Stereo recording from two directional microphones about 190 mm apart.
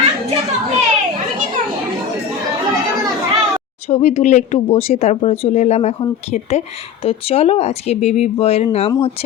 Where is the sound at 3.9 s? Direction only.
35° left (ahead or behind).